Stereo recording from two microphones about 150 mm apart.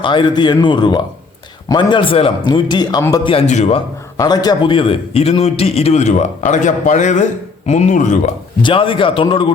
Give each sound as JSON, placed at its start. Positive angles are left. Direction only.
{"t": 0.0, "sound": "a man's voice", "side_deg": 30}
{"t": 3.2, "sound": "a man's voice", "side_deg": 45}
{"t": 4.2, "sound": "a man's voice", "side_deg": 25}
{"t": 8.6, "sound": "a man's voice", "side_deg": 35}